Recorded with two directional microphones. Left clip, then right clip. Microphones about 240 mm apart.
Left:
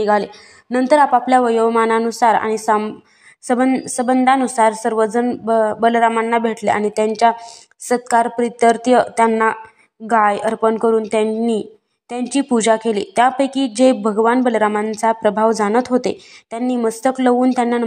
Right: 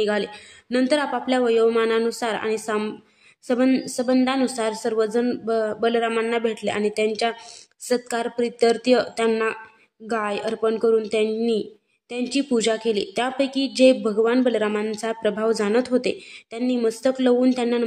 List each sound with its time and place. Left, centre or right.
0.0 s a woman's voice: centre